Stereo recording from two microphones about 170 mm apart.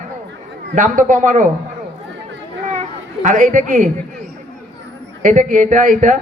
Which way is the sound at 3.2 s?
50° right (ahead or behind).